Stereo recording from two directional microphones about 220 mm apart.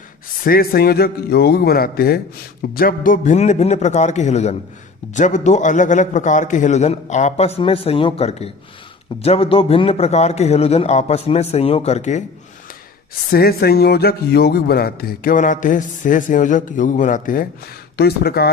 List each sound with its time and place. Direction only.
0.4 s a man's voice: 40° left (ahead or behind)
13.3 s a man's voice: 45° left (ahead or behind)